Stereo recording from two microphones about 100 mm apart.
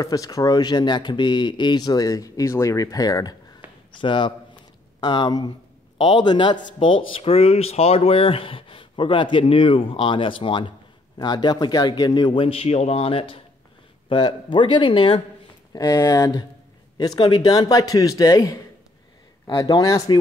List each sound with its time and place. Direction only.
0.0 s speech: 35° left (ahead or behind)
3.9 s a man's voice: 55° left (ahead or behind)
11.1 s a man's voice: 45° left (ahead or behind)
12.4 s speech: 80° left
14.0 s speech: 55° left (ahead or behind)
15.7 s speech: 35° left (ahead or behind)
17.2 s speech: 45° left (ahead or behind)